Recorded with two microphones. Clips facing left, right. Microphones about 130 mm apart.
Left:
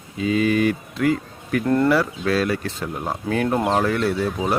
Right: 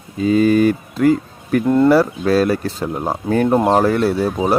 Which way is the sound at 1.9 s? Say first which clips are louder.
Right 6 dB; 40° right (ahead or behind).